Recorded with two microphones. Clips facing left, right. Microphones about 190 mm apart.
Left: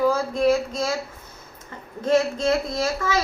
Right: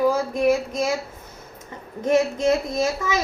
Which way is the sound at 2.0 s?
20° right (ahead or behind).